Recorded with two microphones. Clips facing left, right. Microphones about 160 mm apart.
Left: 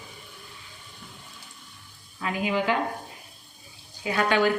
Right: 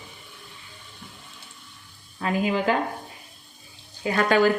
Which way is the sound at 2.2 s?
40° right (ahead or behind).